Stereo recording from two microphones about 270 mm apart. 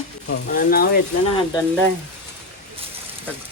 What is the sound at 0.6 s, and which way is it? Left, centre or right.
Speech, left.